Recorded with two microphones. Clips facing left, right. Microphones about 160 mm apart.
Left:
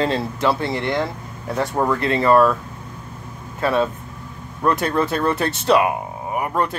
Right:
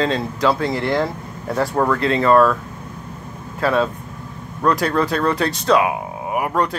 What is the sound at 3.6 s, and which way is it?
Speech, centre (ahead or behind).